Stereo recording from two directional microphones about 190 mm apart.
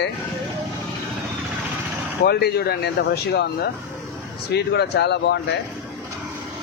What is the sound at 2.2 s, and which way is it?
Speech, 60° left (ahead or behind).